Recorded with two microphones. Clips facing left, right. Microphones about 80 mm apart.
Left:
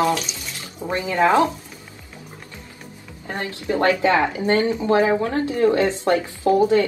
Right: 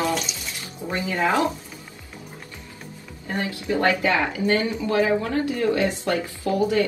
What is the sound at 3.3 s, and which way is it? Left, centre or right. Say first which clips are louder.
Speech: left 1 dB; left.